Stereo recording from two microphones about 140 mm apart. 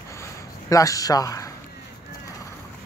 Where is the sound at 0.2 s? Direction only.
25° left (ahead or behind).